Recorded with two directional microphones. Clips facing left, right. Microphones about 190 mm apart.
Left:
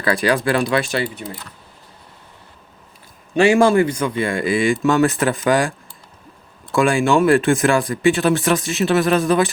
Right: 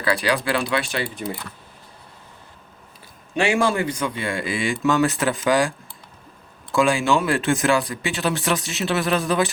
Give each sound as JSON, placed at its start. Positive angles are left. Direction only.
{"t": 0.0, "sound": "speech", "side_deg": 45}
{"t": 3.3, "sound": "speech", "side_deg": 45}
{"t": 6.7, "sound": "speech", "side_deg": 55}